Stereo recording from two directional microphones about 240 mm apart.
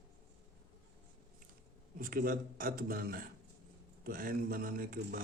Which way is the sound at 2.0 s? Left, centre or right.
Right.